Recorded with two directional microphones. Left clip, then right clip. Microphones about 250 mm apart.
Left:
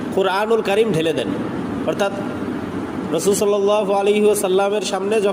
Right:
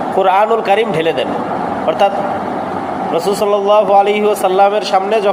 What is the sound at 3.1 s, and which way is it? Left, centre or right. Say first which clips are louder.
A man's voice: right 3 dB; left.